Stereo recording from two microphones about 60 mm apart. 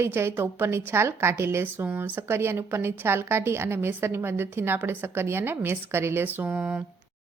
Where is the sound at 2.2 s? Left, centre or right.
Right.